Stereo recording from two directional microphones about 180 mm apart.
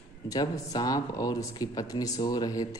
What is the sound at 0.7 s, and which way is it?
Speech, 20° left (ahead or behind).